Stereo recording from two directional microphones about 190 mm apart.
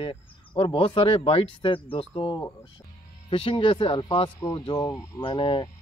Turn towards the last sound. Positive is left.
turn(degrees=25)  # may be behind; listen again after turning